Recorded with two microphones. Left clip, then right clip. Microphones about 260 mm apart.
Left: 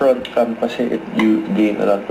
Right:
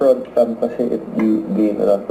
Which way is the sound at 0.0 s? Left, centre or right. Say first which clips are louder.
Right 1 dB; left.